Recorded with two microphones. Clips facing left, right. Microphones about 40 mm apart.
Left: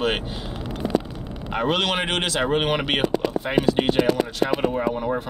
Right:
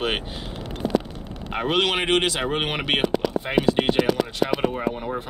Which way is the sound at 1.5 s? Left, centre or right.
Centre.